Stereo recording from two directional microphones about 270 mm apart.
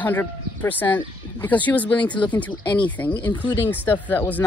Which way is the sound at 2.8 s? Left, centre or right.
Centre.